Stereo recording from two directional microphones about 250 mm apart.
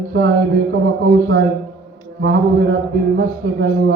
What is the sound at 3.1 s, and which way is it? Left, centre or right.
Speech, right.